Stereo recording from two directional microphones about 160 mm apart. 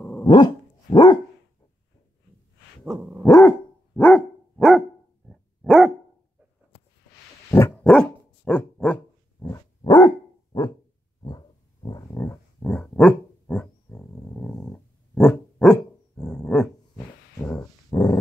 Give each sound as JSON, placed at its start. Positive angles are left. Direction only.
{"t": 0.0, "sound": "dog", "side_deg": 10}
{"t": 0.8, "sound": "dog", "side_deg": 25}
{"t": 2.8, "sound": "dog", "side_deg": -5}
{"t": 3.3, "sound": "dog", "side_deg": 15}
{"t": 7.5, "sound": "dog", "side_deg": 10}
{"t": 9.8, "sound": "dog", "side_deg": 25}
{"t": 11.2, "sound": "dog", "side_deg": 25}
{"t": 17.8, "sound": "dog", "side_deg": 20}